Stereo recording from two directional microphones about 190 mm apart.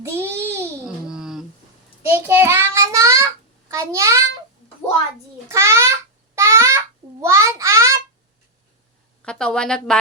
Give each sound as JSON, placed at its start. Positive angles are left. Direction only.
{"t": 0.0, "sound": "babbling", "side_deg": -15}
{"t": 2.0, "sound": "child singing", "side_deg": -10}
{"t": 3.7, "sound": "a child's voice", "side_deg": -15}
{"t": 5.5, "sound": "babbling", "side_deg": -15}
{"t": 6.3, "sound": "a sound", "side_deg": -15}
{"t": 9.2, "sound": "a woman's voice", "side_deg": 5}